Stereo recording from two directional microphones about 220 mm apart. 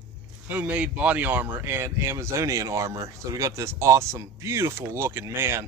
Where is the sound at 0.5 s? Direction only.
5° right (ahead or behind).